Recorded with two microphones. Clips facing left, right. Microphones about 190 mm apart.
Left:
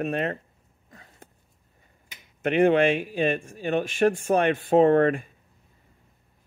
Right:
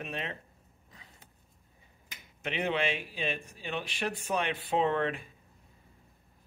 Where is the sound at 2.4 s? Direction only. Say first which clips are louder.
Left 12 dB; 55° left (ahead or behind).